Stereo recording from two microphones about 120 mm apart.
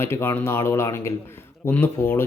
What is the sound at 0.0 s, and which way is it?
Speech, 20° left (ahead or behind).